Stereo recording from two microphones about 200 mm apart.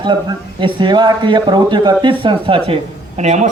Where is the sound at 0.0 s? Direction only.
20° right (ahead or behind).